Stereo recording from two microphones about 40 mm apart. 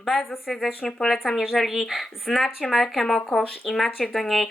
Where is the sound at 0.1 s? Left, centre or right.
Centre.